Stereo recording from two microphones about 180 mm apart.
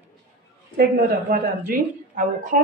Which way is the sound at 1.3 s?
55° right (ahead or behind).